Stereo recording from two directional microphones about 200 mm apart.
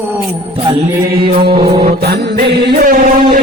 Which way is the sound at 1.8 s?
50° right (ahead or behind).